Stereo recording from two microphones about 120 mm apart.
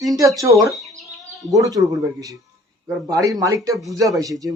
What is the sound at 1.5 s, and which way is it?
A man's voice, 30° right (ahead or behind).